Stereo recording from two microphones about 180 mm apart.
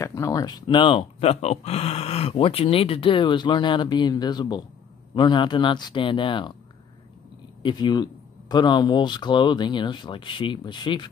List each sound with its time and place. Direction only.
0.0 s speech: 15° left (ahead or behind)
7.6 s speech: 25° left (ahead or behind)